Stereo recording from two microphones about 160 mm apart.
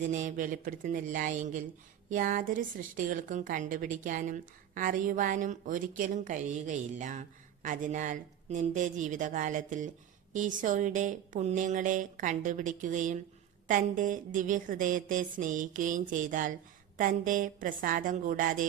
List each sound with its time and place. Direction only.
0.1 s a woman's voice: 55° right (ahead or behind)